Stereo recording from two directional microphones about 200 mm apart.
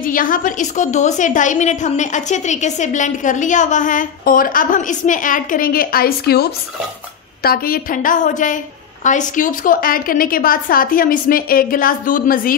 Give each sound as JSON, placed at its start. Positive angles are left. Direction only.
{"t": 0.0, "sound": "a woman's voice", "side_deg": 45}